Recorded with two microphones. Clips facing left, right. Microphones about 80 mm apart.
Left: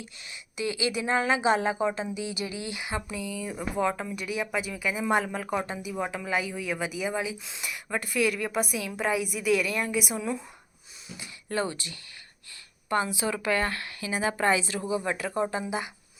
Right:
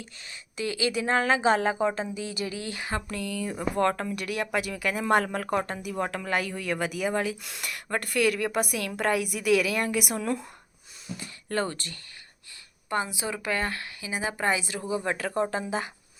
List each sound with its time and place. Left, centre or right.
0.6 s speech: left
0.9 s a woman's voice: right
2.5 s speech: centre
3.1 s speech: centre
3.3 s speech: right
11.2 s a sound: right
11.7 s speech: right
12.9 s a woman's voice: right
14.1 s a woman's voice: centre
14.8 s speech: left
15.0 s a woman's voice: right